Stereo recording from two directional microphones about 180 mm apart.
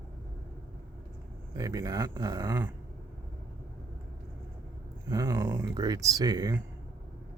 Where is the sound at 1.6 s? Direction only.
20° right (ahead or behind).